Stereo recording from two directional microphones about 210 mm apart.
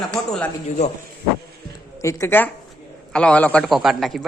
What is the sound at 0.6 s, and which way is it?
Speech, 30° left (ahead or behind).